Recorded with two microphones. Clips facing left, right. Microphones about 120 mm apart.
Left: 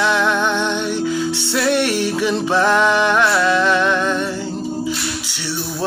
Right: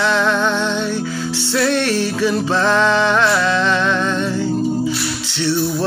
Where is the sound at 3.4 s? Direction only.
10° left (ahead or behind).